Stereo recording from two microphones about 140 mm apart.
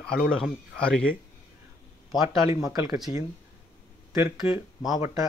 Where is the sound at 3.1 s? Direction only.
50° left (ahead or behind).